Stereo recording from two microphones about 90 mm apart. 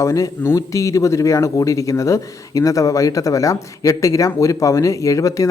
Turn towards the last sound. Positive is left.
turn(degrees=35)  # may be behind; listen again after turning